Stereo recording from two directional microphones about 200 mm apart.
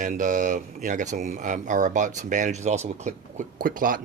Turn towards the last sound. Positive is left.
turn(degrees=-45)  # may be behind; listen again after turning